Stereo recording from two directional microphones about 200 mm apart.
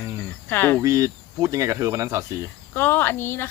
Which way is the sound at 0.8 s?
15° right (ahead or behind).